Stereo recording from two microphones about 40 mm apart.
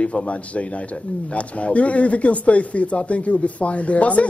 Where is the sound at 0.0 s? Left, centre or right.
Left.